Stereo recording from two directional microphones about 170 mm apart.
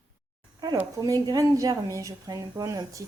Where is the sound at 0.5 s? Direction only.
25° right (ahead or behind).